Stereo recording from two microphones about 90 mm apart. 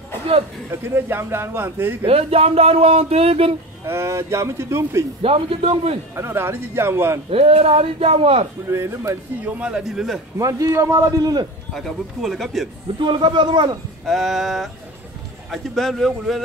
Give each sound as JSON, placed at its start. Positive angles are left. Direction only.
{"t": 0.7, "sound": "a man's voice", "side_deg": -30}
{"t": 2.0, "sound": "speech", "side_deg": -90}
{"t": 3.8, "sound": "speech", "side_deg": -30}
{"t": 5.2, "sound": "speech", "side_deg": -90}
{"t": 6.1, "sound": "a man's voice", "side_deg": -30}
{"t": 7.2, "sound": "speech", "side_deg": -90}
{"t": 8.6, "sound": "speech", "side_deg": -30}
{"t": 9.4, "sound": "a man's voice", "side_deg": -15}
{"t": 10.4, "sound": "speech", "side_deg": -35}
{"t": 11.7, "sound": "speech", "side_deg": 0}
{"t": 13.0, "sound": "speech", "side_deg": -65}
{"t": 14.0, "sound": "speech", "side_deg": 0}